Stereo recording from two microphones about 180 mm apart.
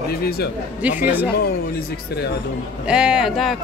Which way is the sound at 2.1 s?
65° left (ahead or behind).